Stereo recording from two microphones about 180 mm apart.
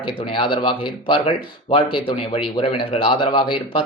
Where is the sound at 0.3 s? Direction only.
30° left (ahead or behind).